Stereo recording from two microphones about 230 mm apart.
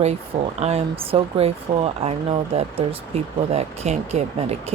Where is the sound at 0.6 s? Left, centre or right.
Right.